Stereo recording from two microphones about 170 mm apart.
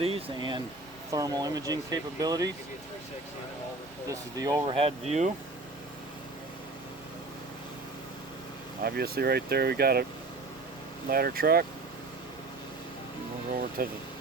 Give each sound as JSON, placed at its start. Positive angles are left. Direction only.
{"t": 0.0, "sound": "speech", "side_deg": -30}
{"t": 4.1, "sound": "speech", "side_deg": -20}
{"t": 4.6, "sound": "speech", "side_deg": -35}
{"t": 8.8, "sound": "speech", "side_deg": -65}
{"t": 11.1, "sound": "speech", "side_deg": -60}
{"t": 13.5, "sound": "speech", "side_deg": -60}